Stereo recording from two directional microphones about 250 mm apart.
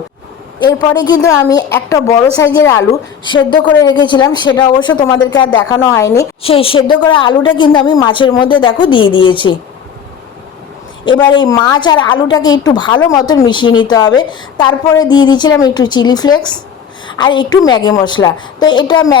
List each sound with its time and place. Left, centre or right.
1.0 s a woman's voice: centre
11.3 s a woman's voice: centre